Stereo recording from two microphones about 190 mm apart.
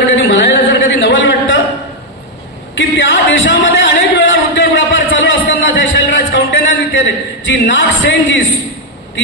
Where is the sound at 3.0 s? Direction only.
75° left (ahead or behind).